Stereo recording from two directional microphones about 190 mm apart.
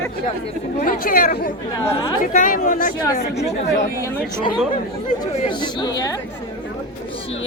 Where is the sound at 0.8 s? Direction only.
50° left (ahead or behind).